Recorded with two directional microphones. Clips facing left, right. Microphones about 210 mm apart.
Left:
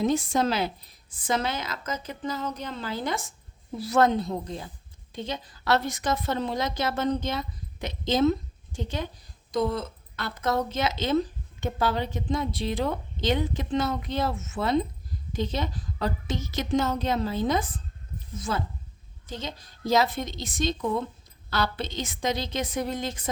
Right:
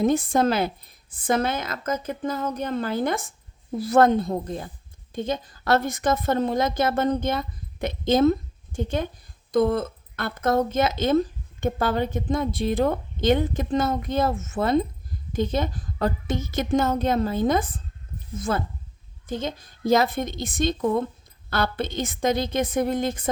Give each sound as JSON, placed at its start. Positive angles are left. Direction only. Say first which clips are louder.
{"t": 0.0, "sound": "speech", "louder": "right 4 dB", "side_deg": -55}